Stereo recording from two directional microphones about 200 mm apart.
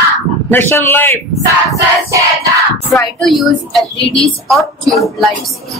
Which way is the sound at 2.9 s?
Centre (ahead or behind).